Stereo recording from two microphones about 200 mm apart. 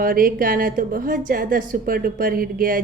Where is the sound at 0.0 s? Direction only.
45° right (ahead or behind).